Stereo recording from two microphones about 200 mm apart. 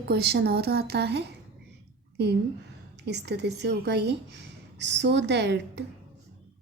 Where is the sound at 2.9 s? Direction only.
55° right (ahead or behind).